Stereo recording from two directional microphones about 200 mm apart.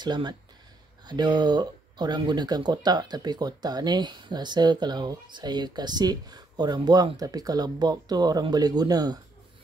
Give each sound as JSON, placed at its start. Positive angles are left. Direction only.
{"t": 0.0, "sound": "speech", "side_deg": -20}